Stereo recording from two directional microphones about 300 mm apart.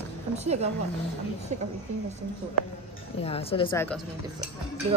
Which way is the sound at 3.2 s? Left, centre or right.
Centre.